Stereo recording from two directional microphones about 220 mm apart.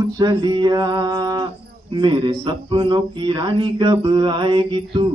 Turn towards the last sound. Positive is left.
turn(degrees=-20)  # may be behind; listen again after turning